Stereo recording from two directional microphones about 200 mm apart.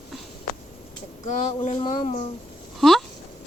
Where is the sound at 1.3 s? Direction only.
35° left (ahead or behind).